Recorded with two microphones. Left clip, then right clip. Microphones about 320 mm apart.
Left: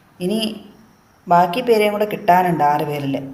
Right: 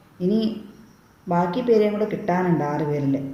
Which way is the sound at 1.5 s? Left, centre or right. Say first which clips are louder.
Left 4 dB; left.